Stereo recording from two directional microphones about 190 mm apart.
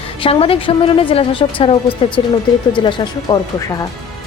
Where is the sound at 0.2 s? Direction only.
30° left (ahead or behind).